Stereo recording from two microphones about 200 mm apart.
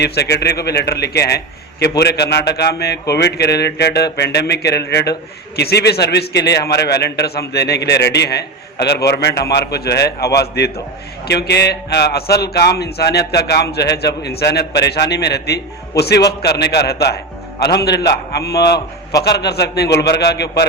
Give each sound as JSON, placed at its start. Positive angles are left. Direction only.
{"t": 0.0, "sound": "a man's voice", "side_deg": 55}